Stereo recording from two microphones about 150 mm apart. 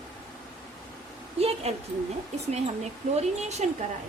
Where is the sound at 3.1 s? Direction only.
50° right (ahead or behind).